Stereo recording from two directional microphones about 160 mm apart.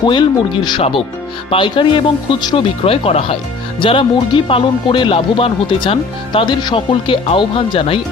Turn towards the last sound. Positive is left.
turn(degrees=35)  # may be behind; listen again after turning